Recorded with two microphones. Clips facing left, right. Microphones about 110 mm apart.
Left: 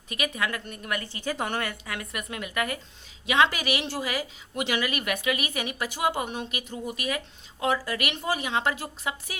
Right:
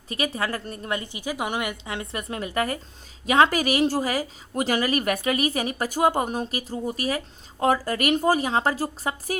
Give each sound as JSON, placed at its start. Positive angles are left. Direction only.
{"t": 0.1, "sound": "a woman's voice", "side_deg": -35}
{"t": 1.0, "sound": "a woman's voice", "side_deg": -15}